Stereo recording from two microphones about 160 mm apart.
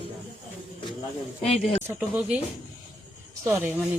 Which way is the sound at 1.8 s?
10° right (ahead or behind).